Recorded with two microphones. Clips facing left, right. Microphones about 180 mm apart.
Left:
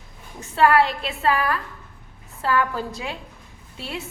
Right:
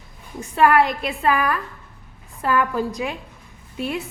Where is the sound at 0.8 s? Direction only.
15° right (ahead or behind).